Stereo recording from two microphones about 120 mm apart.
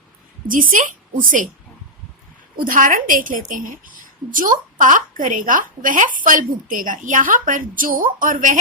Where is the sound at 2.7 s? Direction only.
90° right.